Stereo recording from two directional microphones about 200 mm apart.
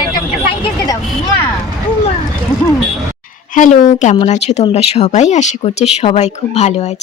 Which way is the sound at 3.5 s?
40° left (ahead or behind).